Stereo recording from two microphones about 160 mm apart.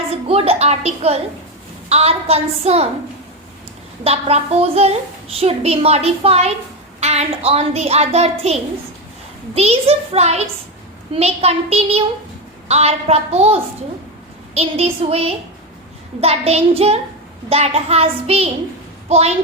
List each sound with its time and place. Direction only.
0.1 s a woman's voice: 40° right (ahead or behind)
4.0 s a woman's voice: 40° right (ahead or behind)
9.6 s a woman's voice: 40° right (ahead or behind)